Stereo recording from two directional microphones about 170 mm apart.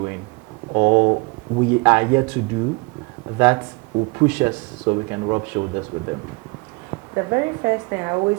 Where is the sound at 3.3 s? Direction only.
20° right (ahead or behind).